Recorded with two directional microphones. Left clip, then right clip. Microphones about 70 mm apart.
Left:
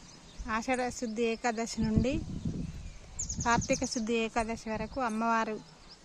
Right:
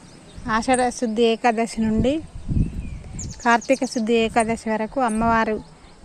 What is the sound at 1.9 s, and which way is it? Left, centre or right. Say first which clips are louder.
Speech: right 9 dB; centre.